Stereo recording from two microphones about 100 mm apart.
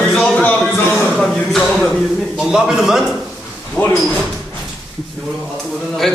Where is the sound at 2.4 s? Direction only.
5° right (ahead or behind).